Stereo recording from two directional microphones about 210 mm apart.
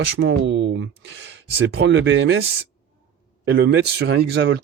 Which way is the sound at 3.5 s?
50° right (ahead or behind).